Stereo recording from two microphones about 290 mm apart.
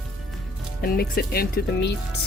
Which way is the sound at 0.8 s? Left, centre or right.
Left.